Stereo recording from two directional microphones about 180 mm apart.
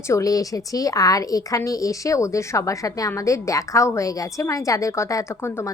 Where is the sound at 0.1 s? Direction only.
20° left (ahead or behind).